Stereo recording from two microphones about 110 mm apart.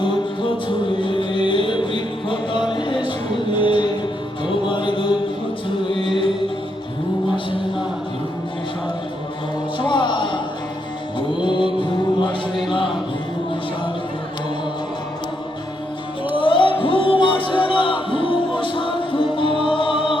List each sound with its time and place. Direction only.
0.0 s music: 50° left (ahead or behind)
4.4 s mantra: 50° left (ahead or behind)
5.6 s music: 50° left (ahead or behind)
9.7 s music: 45° left (ahead or behind)
11.4 s music: 45° left (ahead or behind)
16.3 s music: 50° left (ahead or behind)